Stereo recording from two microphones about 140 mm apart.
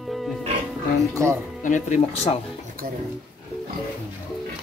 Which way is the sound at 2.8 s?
90° right.